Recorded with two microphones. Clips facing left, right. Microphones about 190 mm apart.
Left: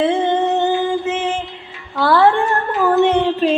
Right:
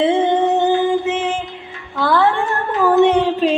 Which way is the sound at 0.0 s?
15° right (ahead or behind).